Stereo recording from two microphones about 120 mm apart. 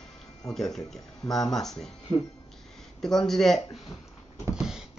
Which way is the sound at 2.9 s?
5° left (ahead or behind).